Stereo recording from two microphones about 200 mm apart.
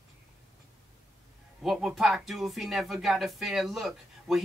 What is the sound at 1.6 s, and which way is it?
Speech, centre (ahead or behind).